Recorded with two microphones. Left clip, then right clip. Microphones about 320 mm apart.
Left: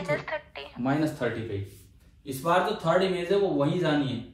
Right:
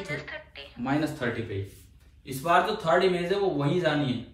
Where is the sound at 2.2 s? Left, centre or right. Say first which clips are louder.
Right 1 dB; centre.